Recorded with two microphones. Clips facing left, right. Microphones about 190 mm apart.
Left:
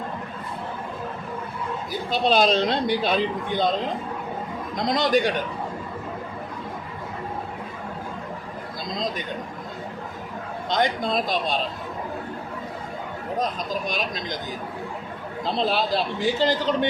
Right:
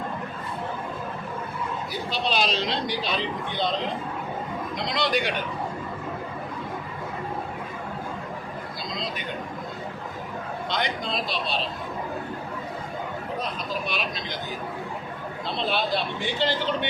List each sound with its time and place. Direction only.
2.0 s speech: 50° left (ahead or behind)
4.8 s speech: 45° left (ahead or behind)
10.7 s speech: 45° left (ahead or behind)
13.4 s speech: 40° left (ahead or behind)
15.4 s speech: 40° left (ahead or behind)